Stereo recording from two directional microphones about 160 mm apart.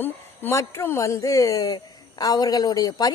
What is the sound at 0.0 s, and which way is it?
A woman's voice, 15° left (ahead or behind).